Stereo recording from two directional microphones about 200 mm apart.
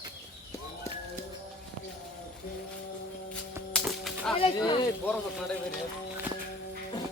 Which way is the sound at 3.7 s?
Centre (ahead or behind).